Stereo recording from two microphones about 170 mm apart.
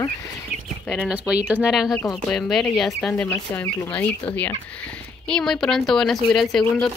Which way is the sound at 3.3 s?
15° left (ahead or behind).